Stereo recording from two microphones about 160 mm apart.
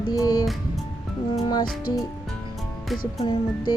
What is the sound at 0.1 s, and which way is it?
Speech, 25° left (ahead or behind).